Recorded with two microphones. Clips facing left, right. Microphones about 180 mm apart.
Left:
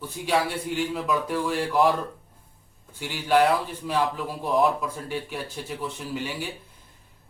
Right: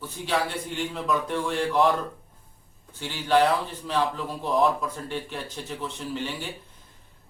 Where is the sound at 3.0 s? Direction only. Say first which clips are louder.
Left 1 dB; 10° left (ahead or behind).